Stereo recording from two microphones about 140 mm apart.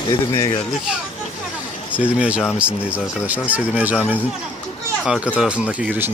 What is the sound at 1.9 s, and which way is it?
Speech, 10° right (ahead or behind).